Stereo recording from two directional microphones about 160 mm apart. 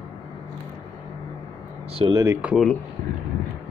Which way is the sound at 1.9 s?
30° right (ahead or behind).